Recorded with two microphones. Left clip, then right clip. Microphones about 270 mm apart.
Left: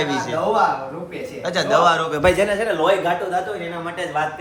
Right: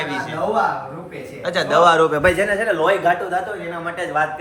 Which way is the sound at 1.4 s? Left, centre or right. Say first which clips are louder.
Right 2 dB; centre.